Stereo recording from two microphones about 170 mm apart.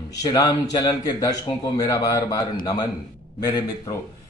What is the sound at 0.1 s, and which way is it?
Speech, 20° left (ahead or behind).